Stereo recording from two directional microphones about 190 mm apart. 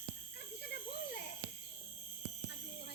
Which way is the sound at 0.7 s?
60° left (ahead or behind).